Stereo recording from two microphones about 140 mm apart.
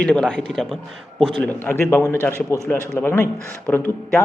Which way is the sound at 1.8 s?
20° left (ahead or behind).